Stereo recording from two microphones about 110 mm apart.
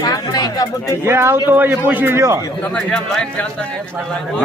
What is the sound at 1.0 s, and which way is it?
A man's voice, 20° right (ahead or behind).